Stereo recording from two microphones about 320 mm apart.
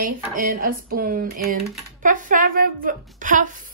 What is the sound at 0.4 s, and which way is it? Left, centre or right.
A woman's voice, right.